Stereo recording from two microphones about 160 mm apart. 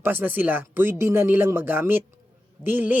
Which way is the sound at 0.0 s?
15° right (ahead or behind).